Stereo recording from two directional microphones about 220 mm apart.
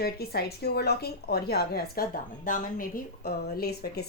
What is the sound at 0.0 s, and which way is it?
A woman's voice, 45° left (ahead or behind).